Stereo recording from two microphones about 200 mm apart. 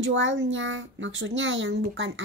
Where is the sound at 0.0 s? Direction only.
70° right (ahead or behind).